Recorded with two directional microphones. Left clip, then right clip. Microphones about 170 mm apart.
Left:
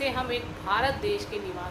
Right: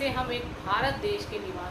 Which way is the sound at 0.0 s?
50° left (ahead or behind).